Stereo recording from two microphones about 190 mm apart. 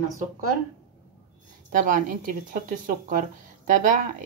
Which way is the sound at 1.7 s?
45° right (ahead or behind).